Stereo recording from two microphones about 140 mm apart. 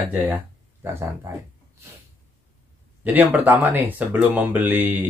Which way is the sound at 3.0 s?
10° right (ahead or behind).